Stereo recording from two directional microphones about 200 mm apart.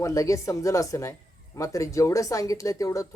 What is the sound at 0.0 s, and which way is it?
Speech, 15° left (ahead or behind).